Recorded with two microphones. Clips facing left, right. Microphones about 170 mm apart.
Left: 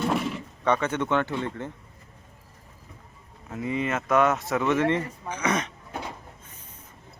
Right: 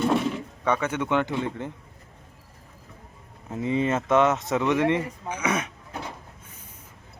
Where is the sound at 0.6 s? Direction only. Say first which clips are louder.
Left 1 dB; 10° right (ahead or behind).